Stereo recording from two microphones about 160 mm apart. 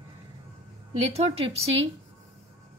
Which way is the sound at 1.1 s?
40° right (ahead or behind).